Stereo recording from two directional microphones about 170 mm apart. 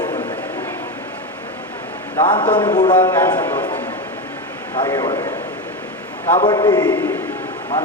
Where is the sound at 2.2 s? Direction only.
30° left (ahead or behind).